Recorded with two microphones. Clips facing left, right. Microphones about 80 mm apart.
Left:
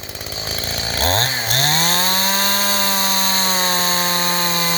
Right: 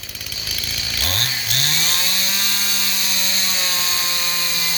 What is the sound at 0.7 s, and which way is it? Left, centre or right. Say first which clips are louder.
Chainsaw: left 9 dB; left.